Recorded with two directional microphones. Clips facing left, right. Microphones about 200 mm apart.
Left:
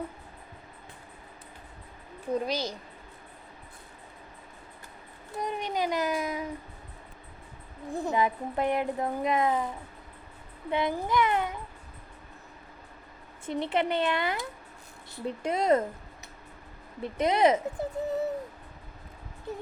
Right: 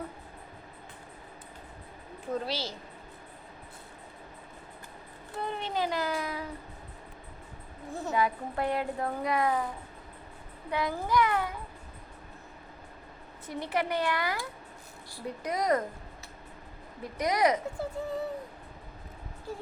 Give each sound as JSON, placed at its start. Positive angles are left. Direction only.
{"t": 2.3, "sound": "a child's voice", "side_deg": 15}
{"t": 5.4, "sound": "a child's voice", "side_deg": 15}
{"t": 7.9, "sound": "a child's voice", "side_deg": 15}
{"t": 10.7, "sound": "a child's voice", "side_deg": 20}
{"t": 13.4, "sound": "a child's voice", "side_deg": 25}
{"t": 17.0, "sound": "a child's voice", "side_deg": 25}